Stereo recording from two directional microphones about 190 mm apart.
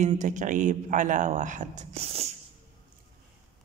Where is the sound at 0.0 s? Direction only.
40° right (ahead or behind).